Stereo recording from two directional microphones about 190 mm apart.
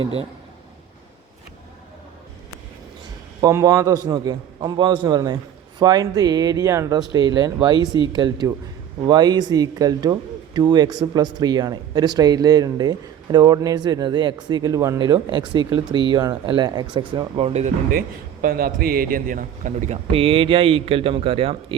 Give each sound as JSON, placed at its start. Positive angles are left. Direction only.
{"t": 3.4, "sound": "speech", "side_deg": -20}
{"t": 18.4, "sound": "speech", "side_deg": -50}